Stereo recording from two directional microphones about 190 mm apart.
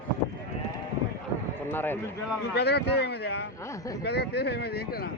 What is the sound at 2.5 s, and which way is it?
Speech, 60° left (ahead or behind).